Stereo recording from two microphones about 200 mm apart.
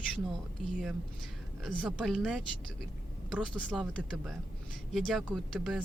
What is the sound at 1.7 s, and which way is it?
Speech, centre (ahead or behind).